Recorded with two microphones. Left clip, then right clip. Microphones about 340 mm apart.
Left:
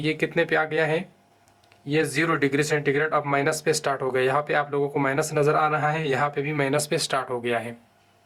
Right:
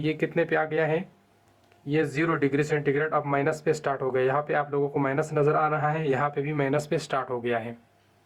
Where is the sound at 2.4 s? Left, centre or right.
Centre.